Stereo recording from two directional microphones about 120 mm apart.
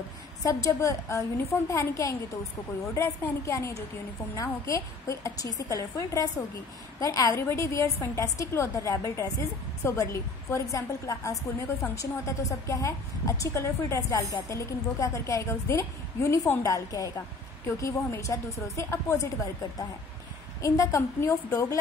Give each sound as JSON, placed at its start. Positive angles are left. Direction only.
{"t": 0.4, "sound": "a woman's voice", "side_deg": 25}
{"t": 20.6, "sound": "a woman's voice", "side_deg": 25}